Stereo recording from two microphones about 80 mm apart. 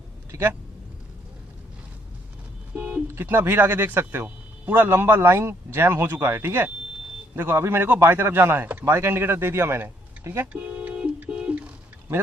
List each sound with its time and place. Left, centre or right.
0.3 s speech: right
2.7 s speech: centre
10.5 s music: centre